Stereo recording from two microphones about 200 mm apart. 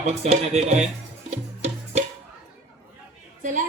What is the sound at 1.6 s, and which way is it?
Music, 35° right (ahead or behind).